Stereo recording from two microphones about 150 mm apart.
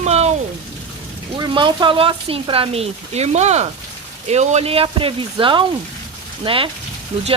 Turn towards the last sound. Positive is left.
turn(degrees=-45)  # may be behind; listen again after turning